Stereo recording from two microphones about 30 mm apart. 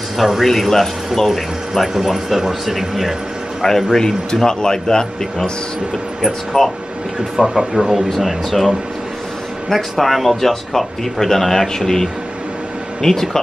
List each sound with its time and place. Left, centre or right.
0.2 s speech: centre
1.3 s speech: centre
3.6 s speech: centre
6.5 s speech: left
7.4 s speech: centre
7.9 s speech: centre